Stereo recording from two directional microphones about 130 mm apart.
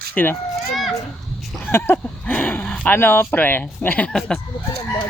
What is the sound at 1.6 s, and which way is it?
Speech, 15° left (ahead or behind).